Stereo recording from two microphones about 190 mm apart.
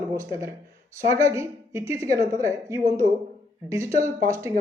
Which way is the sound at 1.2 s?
15° right (ahead or behind).